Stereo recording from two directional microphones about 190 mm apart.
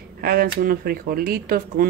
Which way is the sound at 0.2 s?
50° right (ahead or behind).